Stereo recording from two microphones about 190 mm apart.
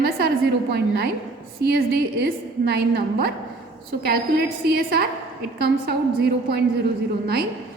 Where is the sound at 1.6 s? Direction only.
60° right (ahead or behind).